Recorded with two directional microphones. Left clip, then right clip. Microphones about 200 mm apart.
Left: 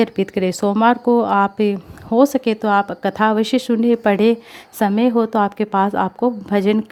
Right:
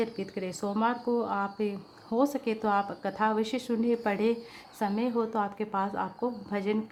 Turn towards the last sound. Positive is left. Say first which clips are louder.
# left 13 dB
turn(degrees=45)  # may be behind; listen again after turning